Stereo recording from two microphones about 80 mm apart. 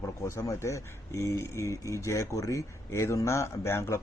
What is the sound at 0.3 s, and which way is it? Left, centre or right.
Speech, left.